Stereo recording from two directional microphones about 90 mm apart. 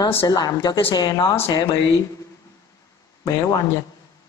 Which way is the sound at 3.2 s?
45° left (ahead or behind).